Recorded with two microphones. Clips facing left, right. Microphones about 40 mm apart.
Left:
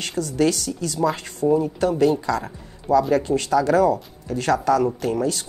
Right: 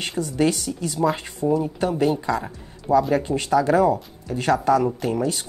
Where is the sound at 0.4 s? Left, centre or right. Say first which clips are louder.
Left 1 dB; right.